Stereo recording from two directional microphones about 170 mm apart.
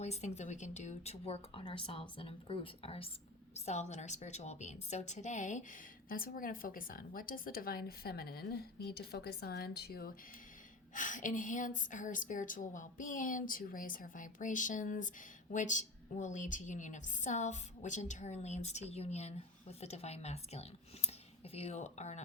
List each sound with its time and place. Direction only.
0.0 s a woman's voice: 40° left (ahead or behind); by 10.2 s 60° left (ahead or behind)
10.9 s a woman's voice: 50° left (ahead or behind)